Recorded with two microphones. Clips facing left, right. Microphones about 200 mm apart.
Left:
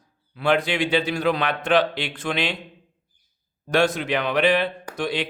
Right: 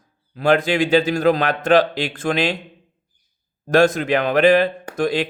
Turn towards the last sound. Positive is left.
turn(degrees=-45)  # may be behind; listen again after turning